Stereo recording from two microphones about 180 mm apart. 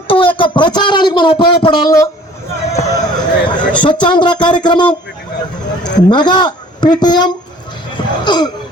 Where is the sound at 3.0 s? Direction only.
25° left (ahead or behind).